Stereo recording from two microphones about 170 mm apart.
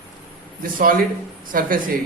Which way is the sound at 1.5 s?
55° right (ahead or behind).